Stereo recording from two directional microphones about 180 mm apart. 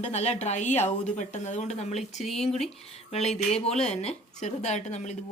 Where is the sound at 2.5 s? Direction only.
35° left (ahead or behind).